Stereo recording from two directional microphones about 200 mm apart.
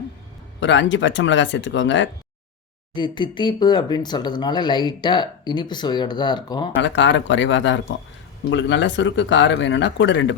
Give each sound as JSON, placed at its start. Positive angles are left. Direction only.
{"t": 0.6, "sound": "speech", "side_deg": 65}
{"t": 2.9, "sound": "speech", "side_deg": 20}
{"t": 6.7, "sound": "speech", "side_deg": 65}